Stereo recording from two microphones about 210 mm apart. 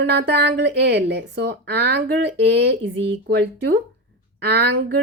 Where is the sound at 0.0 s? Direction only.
55° right (ahead or behind).